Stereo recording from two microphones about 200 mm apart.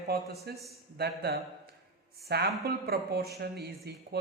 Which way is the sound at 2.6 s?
50° right (ahead or behind).